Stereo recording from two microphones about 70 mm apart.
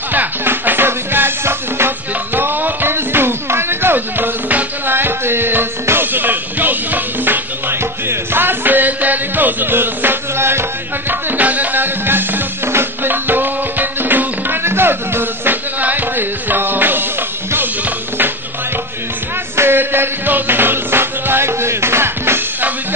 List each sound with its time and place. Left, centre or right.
0.1 s music: right
19.5 s music: right